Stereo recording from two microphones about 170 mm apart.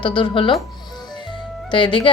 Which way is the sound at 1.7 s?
30° left (ahead or behind).